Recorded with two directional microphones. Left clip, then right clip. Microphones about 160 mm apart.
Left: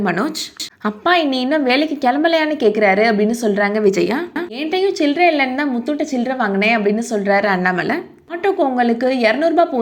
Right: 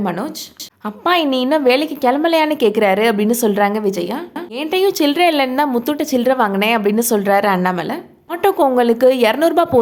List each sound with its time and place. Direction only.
0.0 s a woman's voice: centre (ahead or behind)
1.0 s a woman's voice: 10° right (ahead or behind)
3.8 s speech: 5° left (ahead or behind)
4.7 s a woman's voice: 25° right (ahead or behind)
7.4 s a woman's voice: 15° right (ahead or behind)
8.4 s a woman's voice: 30° right (ahead or behind)